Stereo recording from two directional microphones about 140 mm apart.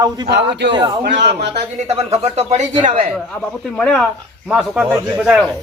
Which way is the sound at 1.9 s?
50° right (ahead or behind).